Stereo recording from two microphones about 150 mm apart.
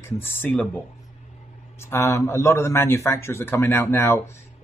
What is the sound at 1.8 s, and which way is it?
Speech, 15° left (ahead or behind).